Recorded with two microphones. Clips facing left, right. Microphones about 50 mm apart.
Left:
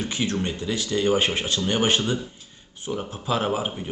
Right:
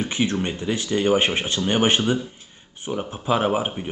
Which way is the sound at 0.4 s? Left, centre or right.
Right.